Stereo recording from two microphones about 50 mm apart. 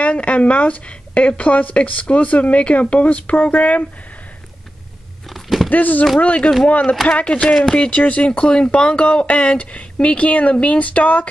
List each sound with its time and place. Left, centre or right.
0.0 s a woman's voice: left
5.3 s a sound: centre
5.7 s a woman's voice: left
7.4 s speech: centre
7.7 s a woman's voice: left